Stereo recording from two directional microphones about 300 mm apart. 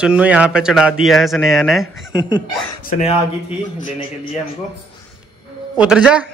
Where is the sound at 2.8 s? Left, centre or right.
Left.